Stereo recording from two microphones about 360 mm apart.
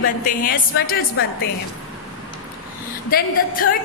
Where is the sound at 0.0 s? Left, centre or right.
Left.